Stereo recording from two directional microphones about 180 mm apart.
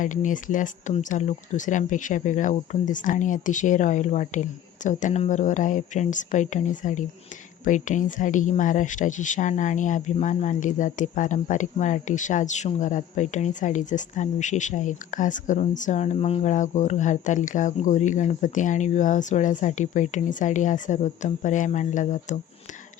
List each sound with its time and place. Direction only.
0.0 s speech: 45° left (ahead or behind)